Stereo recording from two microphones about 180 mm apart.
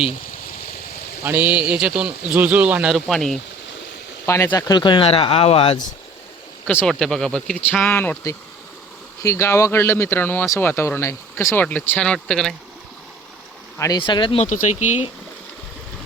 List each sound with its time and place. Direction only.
1.2 s speech: 10° right (ahead or behind)
4.3 s speech: 15° left (ahead or behind); by 5.7 s 30° left (ahead or behind)
6.7 s speech: 5° left (ahead or behind)
13.7 s speech: 20° left (ahead or behind)
14.4 s speech: 45° left (ahead or behind)